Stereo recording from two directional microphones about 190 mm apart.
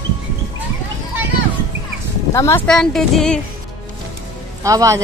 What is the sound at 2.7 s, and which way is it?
Speech, 5° left (ahead or behind).